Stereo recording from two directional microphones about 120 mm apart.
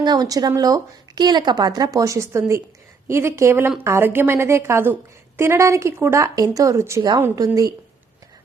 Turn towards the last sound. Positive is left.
turn(degrees=-30)  # may be behind; listen again after turning